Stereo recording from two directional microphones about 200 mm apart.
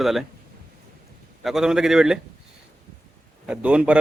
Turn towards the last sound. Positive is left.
turn(degrees=-5)  # may be behind; listen again after turning